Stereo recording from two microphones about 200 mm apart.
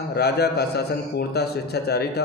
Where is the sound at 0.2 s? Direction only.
55° left (ahead or behind).